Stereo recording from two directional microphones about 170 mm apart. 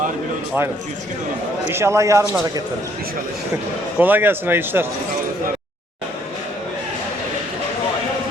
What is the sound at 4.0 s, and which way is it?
Speech, 10° right (ahead or behind).